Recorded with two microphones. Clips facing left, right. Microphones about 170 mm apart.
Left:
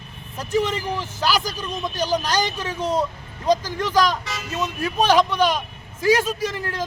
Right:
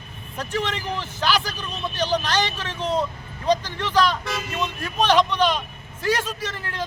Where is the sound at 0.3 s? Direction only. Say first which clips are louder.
Left 5 dB; 10° left (ahead or behind).